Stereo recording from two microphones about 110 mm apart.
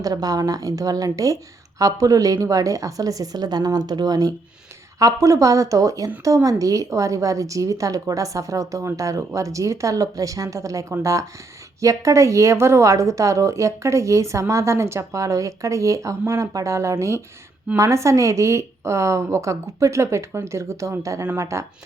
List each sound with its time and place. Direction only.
0.0 s a woman's voice: 35° right (ahead or behind)